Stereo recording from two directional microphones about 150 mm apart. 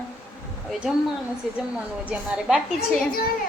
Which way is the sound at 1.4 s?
Centre (ahead or behind).